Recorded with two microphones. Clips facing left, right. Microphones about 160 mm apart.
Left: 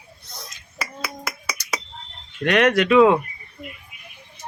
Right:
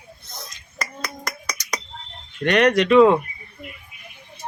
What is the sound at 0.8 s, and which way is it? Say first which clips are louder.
Finger snapping: even; 5° left (ahead or behind).